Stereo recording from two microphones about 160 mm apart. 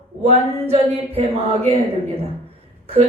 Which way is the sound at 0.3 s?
40° right (ahead or behind).